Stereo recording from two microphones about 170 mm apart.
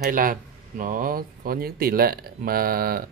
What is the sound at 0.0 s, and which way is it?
Speech, 55° right (ahead or behind).